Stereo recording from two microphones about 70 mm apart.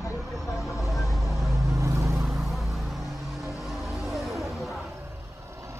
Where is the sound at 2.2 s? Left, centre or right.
Centre.